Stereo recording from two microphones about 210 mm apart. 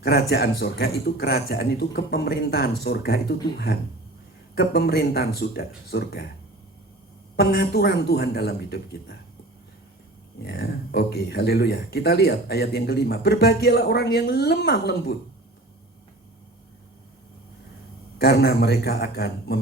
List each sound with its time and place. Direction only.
0.0 s speech: 50° left (ahead or behind)
7.3 s speech: 50° left (ahead or behind)
10.4 s speech: 50° left (ahead or behind)
18.2 s speech: 50° left (ahead or behind)